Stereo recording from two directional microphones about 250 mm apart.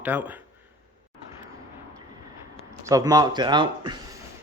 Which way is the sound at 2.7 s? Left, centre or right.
Centre.